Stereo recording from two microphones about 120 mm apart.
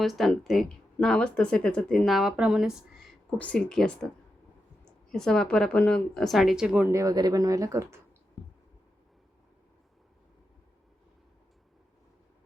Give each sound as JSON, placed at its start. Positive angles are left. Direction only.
{"t": 0.0, "sound": "speech", "side_deg": 0}
{"t": 3.2, "sound": "speech", "side_deg": 10}
{"t": 5.1, "sound": "speech", "side_deg": 5}
{"t": 6.8, "sound": "speech", "side_deg": -25}